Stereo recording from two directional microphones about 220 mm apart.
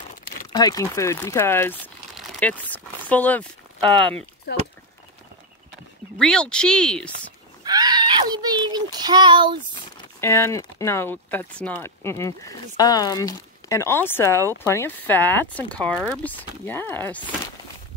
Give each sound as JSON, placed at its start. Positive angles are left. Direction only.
{"t": 0.5, "sound": "speech", "side_deg": 15}
{"t": 6.1, "sound": "speech", "side_deg": 5}
{"t": 7.6, "sound": "child singing", "side_deg": -20}
{"t": 10.2, "sound": "speech", "side_deg": 10}